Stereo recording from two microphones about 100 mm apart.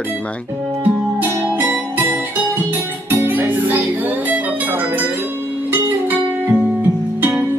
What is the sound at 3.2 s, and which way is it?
Music, 20° right (ahead or behind).